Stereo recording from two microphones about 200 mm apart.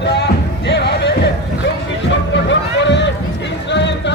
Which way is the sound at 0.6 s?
60° left (ahead or behind).